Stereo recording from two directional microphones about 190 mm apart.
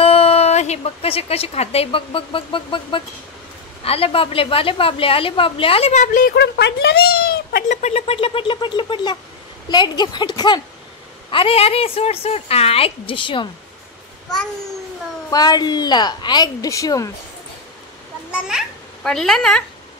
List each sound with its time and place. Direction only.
0.0 s a woman's voice: 30° left (ahead or behind)
6.3 s a woman's voice: 60° left (ahead or behind); by 13.5 s 25° left (ahead or behind)
15.3 s a woman's voice: 20° left (ahead or behind)
18.3 s a child's voice: centre (ahead or behind)